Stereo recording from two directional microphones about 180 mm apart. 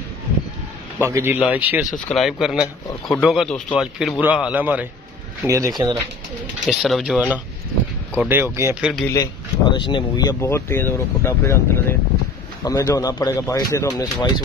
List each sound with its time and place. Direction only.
1.0 s a man's voice: 15° right (ahead or behind)
6.7 s a man's voice: centre (ahead or behind)
9.0 s speech: 20° left (ahead or behind)